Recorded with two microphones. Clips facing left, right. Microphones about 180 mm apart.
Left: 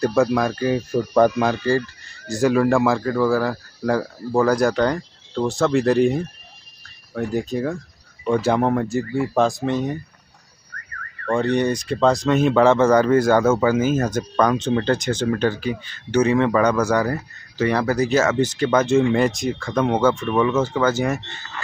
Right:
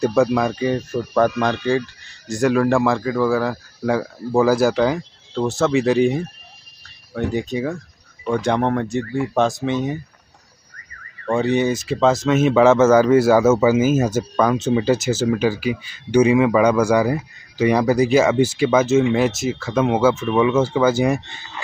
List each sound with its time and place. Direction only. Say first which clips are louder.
0.0 s speech: right 1 dB; centre (ahead or behind)
7.3 s speech: left 2 dB; centre (ahead or behind)
10.7 s car alarm: left 8 dB; 60° left (ahead or behind)
11.3 s a man's voice: right 1 dB; 5° right (ahead or behind)